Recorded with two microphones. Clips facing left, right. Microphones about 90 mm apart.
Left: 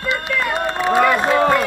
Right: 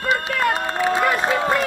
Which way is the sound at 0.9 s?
75° left (ahead or behind).